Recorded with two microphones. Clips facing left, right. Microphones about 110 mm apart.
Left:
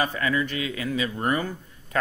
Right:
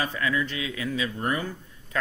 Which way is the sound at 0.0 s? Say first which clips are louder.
Left 2 dB; 55° left (ahead or behind).